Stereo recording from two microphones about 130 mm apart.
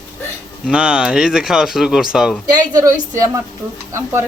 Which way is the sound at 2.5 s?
30° right (ahead or behind).